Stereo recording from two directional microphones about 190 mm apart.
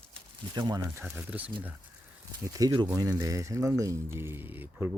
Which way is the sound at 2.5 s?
20° right (ahead or behind).